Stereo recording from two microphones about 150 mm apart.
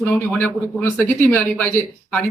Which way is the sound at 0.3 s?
15° left (ahead or behind).